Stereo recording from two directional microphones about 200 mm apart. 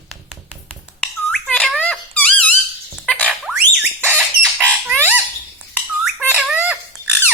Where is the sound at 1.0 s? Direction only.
5° left (ahead or behind).